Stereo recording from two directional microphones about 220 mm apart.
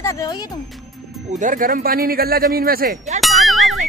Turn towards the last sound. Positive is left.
turn(degrees=0)  # may be behind; listen again after turning